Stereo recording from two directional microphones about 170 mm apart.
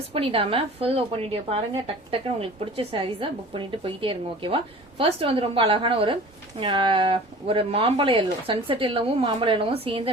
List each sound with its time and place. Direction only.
0.1 s a woman's voice: 35° right (ahead or behind)